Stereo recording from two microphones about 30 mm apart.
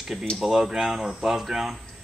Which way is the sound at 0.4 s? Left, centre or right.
Centre.